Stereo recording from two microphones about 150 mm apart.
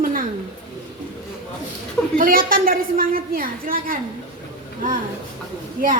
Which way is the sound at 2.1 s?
70° right (ahead or behind).